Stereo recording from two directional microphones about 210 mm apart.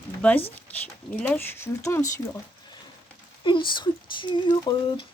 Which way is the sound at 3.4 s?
20° left (ahead or behind).